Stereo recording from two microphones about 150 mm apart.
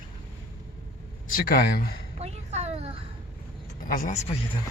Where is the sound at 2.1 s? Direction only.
45° right (ahead or behind).